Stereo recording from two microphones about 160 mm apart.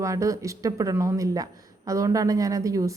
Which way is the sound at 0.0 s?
20° right (ahead or behind).